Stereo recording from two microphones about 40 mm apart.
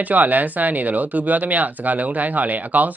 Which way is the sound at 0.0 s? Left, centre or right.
Right.